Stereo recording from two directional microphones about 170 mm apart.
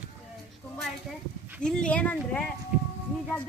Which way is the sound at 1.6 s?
5° left (ahead or behind).